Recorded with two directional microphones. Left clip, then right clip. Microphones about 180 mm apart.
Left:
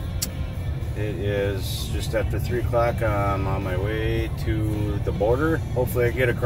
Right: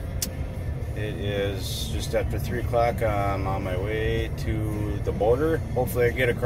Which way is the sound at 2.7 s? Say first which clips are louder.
Even; 5° left (ahead or behind).